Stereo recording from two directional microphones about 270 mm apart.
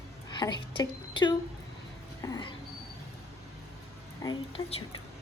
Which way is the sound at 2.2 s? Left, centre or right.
Centre.